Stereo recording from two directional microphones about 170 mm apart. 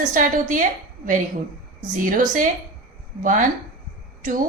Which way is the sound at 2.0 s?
55° right (ahead or behind).